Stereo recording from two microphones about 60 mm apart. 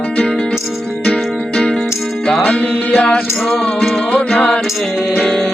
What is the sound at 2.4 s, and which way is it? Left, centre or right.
Music, centre.